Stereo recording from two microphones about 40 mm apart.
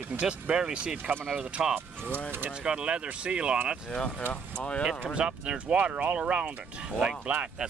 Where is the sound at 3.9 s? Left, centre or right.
Left.